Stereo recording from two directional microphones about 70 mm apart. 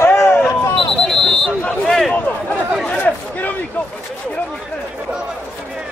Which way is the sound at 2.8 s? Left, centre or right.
Left.